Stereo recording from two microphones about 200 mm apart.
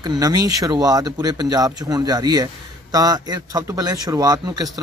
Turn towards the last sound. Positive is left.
turn(degrees=-20)  # may be behind; listen again after turning